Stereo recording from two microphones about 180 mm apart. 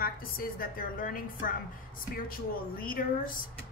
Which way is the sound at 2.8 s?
55° left (ahead or behind).